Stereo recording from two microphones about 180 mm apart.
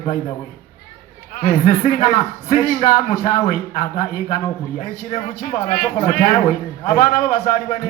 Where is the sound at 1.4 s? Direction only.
55° left (ahead or behind).